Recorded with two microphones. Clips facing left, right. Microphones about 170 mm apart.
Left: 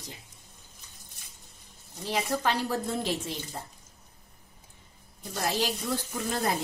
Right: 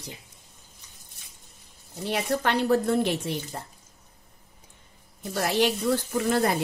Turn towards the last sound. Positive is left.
turn(degrees=-65)  # may be behind; listen again after turning